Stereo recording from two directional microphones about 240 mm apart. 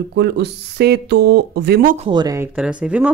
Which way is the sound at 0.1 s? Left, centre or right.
Right.